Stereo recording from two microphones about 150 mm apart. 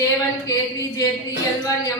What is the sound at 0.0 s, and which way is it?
A woman's voice, 20° left (ahead or behind).